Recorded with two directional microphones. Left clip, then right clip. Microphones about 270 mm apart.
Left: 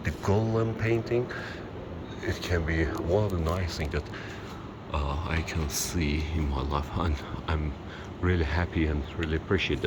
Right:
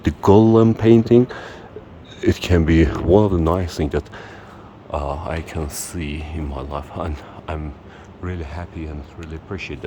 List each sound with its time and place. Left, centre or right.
0.0 s speech: right
4.9 s speech: centre